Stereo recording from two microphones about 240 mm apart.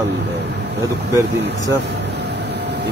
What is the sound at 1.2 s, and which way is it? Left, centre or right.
Speech, right.